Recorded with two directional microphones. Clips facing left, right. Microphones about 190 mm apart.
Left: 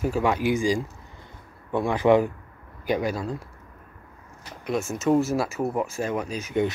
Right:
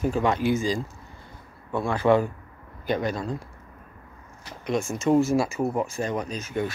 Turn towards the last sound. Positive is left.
turn(degrees=15)  # may be behind; listen again after turning